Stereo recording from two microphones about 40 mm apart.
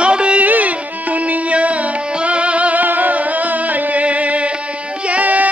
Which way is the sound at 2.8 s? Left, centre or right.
Right.